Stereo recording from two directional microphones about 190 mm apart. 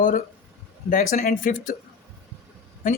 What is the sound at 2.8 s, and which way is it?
Speech, 45° left (ahead or behind).